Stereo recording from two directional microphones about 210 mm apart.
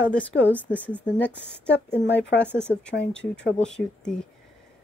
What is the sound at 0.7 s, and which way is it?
Speech, 5° left (ahead or behind).